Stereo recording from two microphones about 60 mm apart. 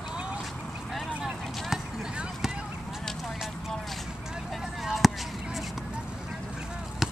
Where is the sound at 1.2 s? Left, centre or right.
Centre.